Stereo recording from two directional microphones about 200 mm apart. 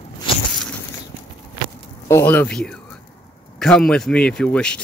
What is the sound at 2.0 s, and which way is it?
Speech, 10° left (ahead or behind).